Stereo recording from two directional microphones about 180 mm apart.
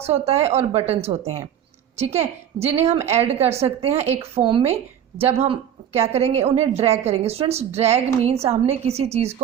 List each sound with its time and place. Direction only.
0.0 s a woman's voice: 35° right (ahead or behind)